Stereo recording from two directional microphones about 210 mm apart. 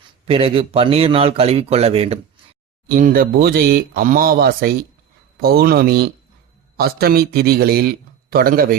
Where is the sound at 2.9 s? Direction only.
40° right (ahead or behind).